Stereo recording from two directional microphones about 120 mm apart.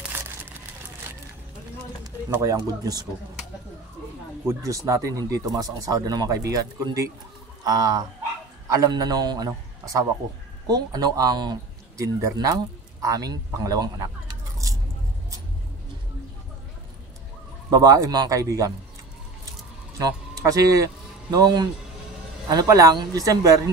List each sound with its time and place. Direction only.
0.1 s crumpling: 20° right (ahead or behind)
2.3 s speech: 25° right (ahead or behind)
4.5 s a man's voice: 25° right (ahead or behind)
10.7 s a man's voice: 35° right (ahead or behind)
17.6 s speech: 30° right (ahead or behind)
20.0 s a man's voice: 30° right (ahead or behind)